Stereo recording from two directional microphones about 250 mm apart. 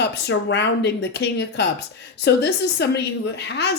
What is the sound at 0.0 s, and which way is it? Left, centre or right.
A woman's voice, left.